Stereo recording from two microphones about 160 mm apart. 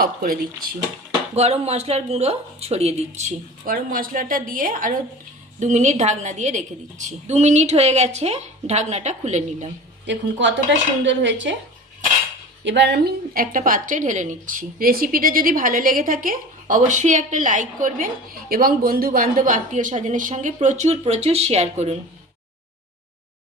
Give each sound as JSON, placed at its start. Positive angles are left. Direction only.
{"t": 0.0, "sound": "a woman's voice", "side_deg": -65}
{"t": 1.4, "sound": "speech", "side_deg": -40}
{"t": 3.7, "sound": "a woman's voice", "side_deg": -60}
{"t": 5.5, "sound": "a woman's voice", "side_deg": -50}
{"t": 10.1, "sound": "a woman's voice", "side_deg": -90}
{"t": 12.7, "sound": "a woman's voice", "side_deg": -90}